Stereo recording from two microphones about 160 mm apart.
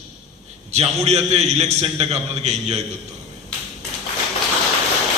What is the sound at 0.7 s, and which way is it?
A man's voice, 40° right (ahead or behind).